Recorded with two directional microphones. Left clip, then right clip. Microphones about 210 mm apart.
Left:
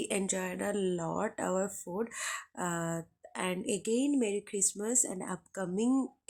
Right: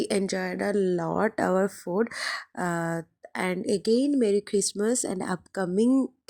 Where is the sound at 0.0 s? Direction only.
25° right (ahead or behind).